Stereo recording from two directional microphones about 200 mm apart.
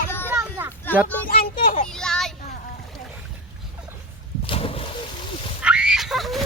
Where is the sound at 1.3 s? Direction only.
45° left (ahead or behind).